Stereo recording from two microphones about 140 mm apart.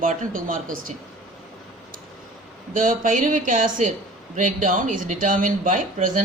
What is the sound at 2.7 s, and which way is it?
Speech, 70° right (ahead or behind).